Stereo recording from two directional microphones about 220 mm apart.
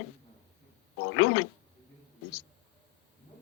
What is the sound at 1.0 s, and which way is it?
Speech, 70° left (ahead or behind).